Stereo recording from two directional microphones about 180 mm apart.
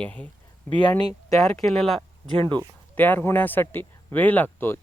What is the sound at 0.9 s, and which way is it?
Speech, 25° left (ahead or behind).